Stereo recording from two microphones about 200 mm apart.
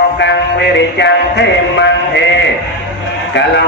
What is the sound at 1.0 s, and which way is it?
Music, 60° left (ahead or behind).